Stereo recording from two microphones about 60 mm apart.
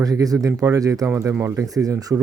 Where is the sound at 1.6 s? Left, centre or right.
Right.